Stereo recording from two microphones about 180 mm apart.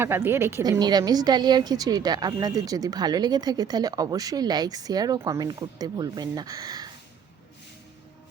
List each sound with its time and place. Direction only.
0.0 s a woman's voice: 15° right (ahead or behind)